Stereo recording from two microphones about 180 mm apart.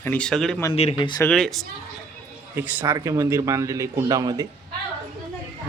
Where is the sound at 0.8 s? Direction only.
30° left (ahead or behind).